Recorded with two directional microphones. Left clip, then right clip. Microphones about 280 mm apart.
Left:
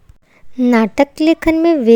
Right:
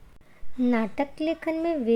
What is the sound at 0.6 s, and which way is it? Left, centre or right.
A woman's voice, left.